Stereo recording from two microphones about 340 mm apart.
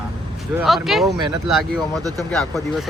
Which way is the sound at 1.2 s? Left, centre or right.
Centre.